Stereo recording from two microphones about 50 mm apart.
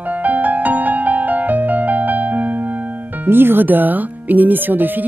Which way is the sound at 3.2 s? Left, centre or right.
Right.